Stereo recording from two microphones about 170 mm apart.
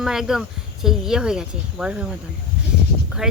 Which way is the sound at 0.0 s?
Centre (ahead or behind).